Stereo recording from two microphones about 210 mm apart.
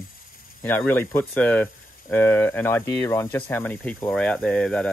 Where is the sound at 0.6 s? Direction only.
10° left (ahead or behind).